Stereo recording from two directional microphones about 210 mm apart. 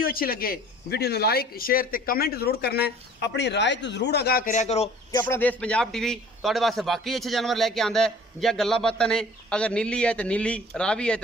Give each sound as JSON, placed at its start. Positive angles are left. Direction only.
{"t": 0.0, "sound": "speech", "side_deg": 45}
{"t": 5.2, "sound": "a man's voice", "side_deg": 10}